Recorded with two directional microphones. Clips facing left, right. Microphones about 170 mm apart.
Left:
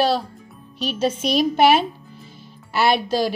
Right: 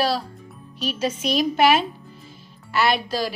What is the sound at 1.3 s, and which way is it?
Speech, centre (ahead or behind).